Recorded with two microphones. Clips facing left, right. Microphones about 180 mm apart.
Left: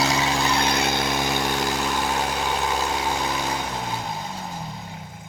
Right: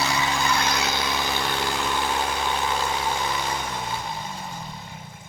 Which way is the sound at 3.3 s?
40° left (ahead or behind).